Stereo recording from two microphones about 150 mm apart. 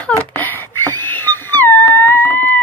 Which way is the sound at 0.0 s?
15° left (ahead or behind).